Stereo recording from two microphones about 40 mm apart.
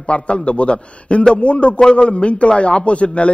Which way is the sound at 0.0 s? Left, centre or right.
Left.